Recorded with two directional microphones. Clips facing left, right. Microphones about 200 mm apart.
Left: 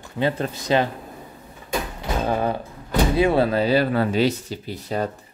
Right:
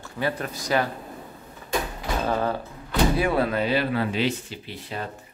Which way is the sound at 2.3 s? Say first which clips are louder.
Left 2 dB; 15° left (ahead or behind).